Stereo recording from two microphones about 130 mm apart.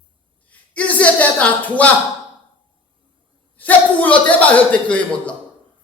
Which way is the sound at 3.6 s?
10° left (ahead or behind).